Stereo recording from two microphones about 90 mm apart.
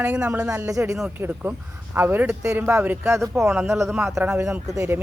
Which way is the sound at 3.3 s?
5° right (ahead or behind).